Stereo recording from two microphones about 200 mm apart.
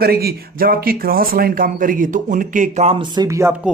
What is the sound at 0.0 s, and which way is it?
Speech, 50° right (ahead or behind).